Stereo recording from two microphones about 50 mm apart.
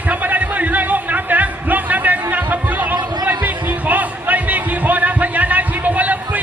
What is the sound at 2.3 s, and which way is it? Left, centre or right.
Music, right.